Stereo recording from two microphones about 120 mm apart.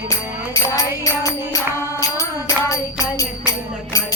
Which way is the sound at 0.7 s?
30° left (ahead or behind).